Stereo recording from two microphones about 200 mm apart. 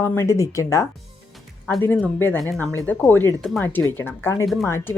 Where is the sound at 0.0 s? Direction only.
10° left (ahead or behind).